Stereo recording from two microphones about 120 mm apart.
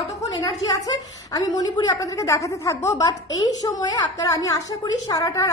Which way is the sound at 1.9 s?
25° left (ahead or behind).